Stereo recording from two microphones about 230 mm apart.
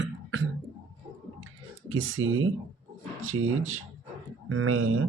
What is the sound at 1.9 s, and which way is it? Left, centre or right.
Speech, right.